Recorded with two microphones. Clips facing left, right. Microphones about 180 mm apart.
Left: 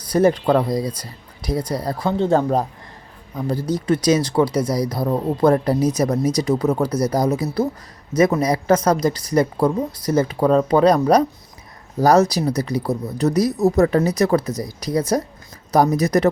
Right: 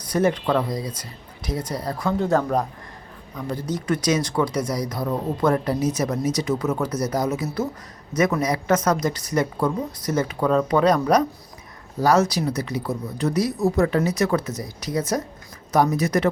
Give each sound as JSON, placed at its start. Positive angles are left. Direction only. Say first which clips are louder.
{"t": 0.1, "sound": "speech", "louder": "left 5 dB", "side_deg": 35}